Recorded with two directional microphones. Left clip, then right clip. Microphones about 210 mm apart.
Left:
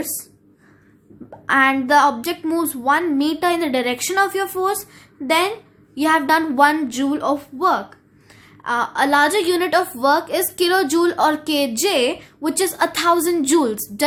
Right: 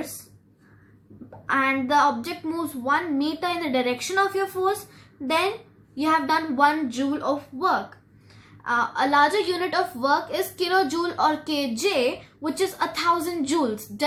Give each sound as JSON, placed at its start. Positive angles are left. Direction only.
{"t": 1.5, "sound": "a woman's voice", "side_deg": 45}